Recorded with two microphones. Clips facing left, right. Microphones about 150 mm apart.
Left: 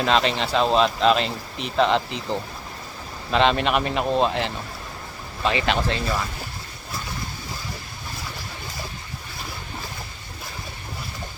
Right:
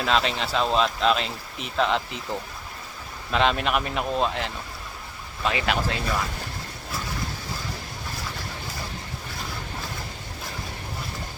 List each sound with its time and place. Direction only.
0.0 s speech: centre (ahead or behind)
3.3 s speech: 5° right (ahead or behind)